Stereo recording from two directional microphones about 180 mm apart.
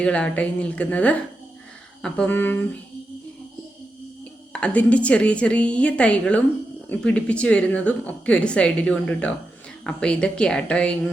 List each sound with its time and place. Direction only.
0.0 s a woman's voice: 5° left (ahead or behind)
4.5 s a woman's voice: 5° left (ahead or behind)